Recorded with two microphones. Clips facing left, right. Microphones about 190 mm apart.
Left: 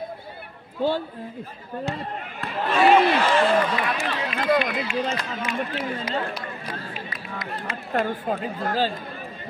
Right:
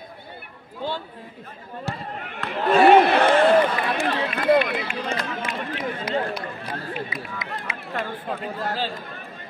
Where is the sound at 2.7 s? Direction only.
60° right (ahead or behind).